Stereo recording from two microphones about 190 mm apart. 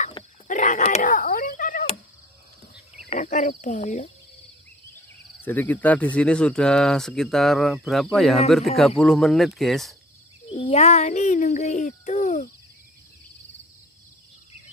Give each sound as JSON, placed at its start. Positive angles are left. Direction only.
{"t": 0.0, "sound": "a sound", "side_deg": 40}
{"t": 3.1, "sound": "speech", "side_deg": 40}
{"t": 5.4, "sound": "speech", "side_deg": 10}
{"t": 10.7, "sound": "speech", "side_deg": 35}